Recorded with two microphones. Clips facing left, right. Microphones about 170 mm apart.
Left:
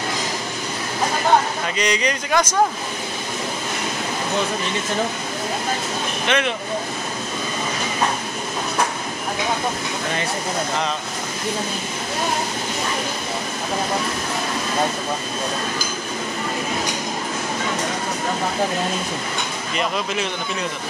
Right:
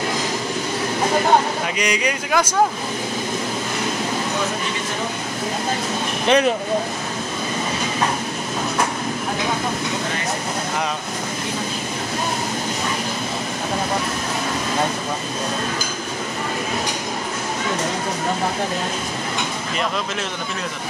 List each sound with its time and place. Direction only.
1.8 s speech: 10° right (ahead or behind)
6.2 s speech: 35° right (ahead or behind)